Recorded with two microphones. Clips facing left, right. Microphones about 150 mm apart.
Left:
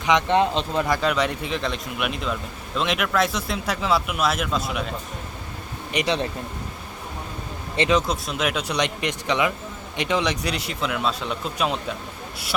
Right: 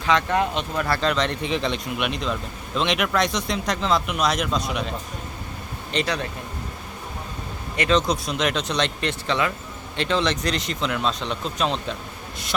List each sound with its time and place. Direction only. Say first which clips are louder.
0.0 s speech: left 2 dB; 20° left (ahead or behind)
0.9 s speech: left 1 dB; 10° left (ahead or behind)
5.9 s a man's voice: left 1 dB; 15° left (ahead or behind)
7.9 s a man's voice: right 3 dB; 5° left (ahead or behind)